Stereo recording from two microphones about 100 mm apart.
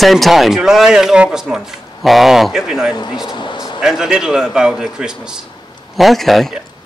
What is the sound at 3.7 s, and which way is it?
Speech, 5° right (ahead or behind).